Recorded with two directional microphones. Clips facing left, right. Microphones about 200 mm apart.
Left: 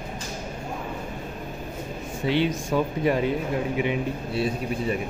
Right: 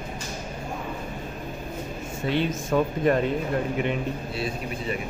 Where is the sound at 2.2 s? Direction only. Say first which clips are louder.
Left 2 dB; 10° left (ahead or behind).